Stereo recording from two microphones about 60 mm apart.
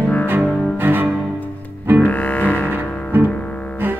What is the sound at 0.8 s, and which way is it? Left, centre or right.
Cello, right.